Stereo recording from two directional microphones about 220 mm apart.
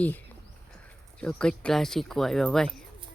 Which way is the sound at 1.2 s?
5° left (ahead or behind).